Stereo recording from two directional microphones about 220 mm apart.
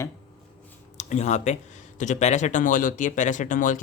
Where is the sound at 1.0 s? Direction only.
30° left (ahead or behind).